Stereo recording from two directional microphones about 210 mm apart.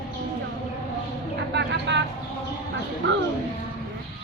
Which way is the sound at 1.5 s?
55° right (ahead or behind).